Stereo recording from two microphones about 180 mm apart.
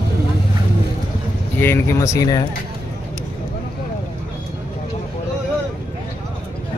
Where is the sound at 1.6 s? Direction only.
15° left (ahead or behind).